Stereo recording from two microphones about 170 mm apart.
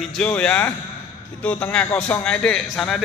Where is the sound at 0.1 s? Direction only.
5° left (ahead or behind).